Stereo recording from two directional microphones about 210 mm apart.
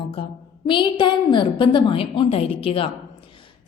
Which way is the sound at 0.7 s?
20° left (ahead or behind).